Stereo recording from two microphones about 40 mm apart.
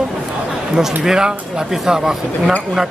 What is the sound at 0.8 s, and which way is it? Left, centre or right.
Speech, centre.